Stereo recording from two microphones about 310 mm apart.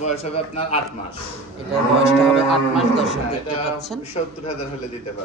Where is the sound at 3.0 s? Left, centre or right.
Left.